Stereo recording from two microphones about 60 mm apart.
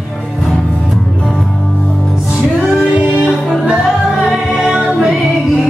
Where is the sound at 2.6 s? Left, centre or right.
Right.